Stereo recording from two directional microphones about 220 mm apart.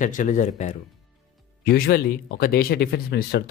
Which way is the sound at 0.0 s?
35° left (ahead or behind).